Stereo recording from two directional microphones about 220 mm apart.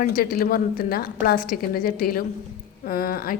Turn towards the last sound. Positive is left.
turn(degrees=40)  # may be behind; listen again after turning